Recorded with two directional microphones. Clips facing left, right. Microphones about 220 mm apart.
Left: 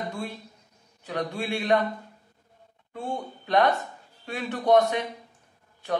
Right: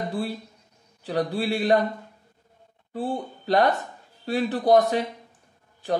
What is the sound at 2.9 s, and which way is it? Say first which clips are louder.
A man's voice: right 4 dB; 35° right (ahead or behind).